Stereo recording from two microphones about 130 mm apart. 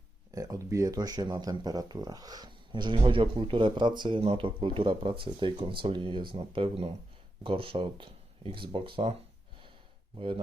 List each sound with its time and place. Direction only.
0.3 s speech: 25° right (ahead or behind); by 9.1 s 45° right (ahead or behind)
10.2 s speech: 45° right (ahead or behind)